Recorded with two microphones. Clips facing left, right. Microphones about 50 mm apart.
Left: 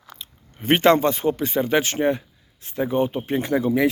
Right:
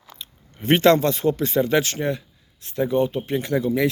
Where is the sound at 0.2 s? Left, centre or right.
Centre.